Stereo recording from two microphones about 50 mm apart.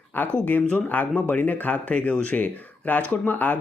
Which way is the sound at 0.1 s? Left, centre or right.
Left.